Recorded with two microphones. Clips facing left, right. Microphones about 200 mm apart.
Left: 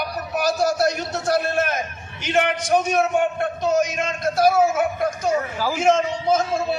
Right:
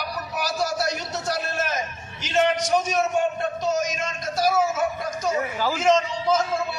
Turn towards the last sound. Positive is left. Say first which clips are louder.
# left 2 dB
turn(degrees=55)  # may be behind; listen again after turning